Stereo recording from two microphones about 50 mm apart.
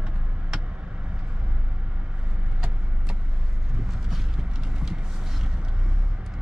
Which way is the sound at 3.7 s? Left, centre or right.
Centre.